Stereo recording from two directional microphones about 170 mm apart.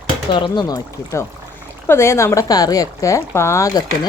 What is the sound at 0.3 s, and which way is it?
A woman's voice, 25° left (ahead or behind).